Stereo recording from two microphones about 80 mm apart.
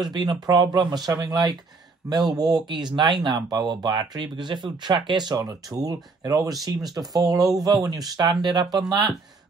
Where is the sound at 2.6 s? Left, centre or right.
Right.